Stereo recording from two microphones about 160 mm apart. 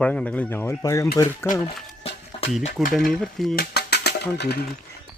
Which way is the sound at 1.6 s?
40° left (ahead or behind).